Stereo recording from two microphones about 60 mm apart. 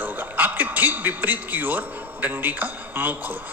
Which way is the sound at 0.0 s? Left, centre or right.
Right.